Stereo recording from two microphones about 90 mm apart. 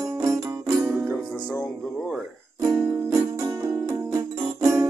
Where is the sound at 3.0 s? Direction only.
35° right (ahead or behind).